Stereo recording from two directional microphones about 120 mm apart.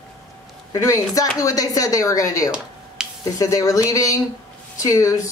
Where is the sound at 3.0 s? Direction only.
5° right (ahead or behind).